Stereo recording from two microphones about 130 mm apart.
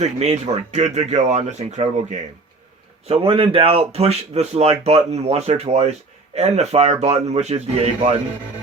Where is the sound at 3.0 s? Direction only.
45° right (ahead or behind).